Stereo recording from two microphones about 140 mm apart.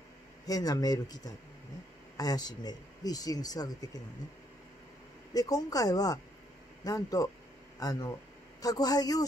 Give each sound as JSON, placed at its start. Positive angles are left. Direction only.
{"t": 0.5, "sound": "speech", "side_deg": 25}
{"t": 5.3, "sound": "speech", "side_deg": 25}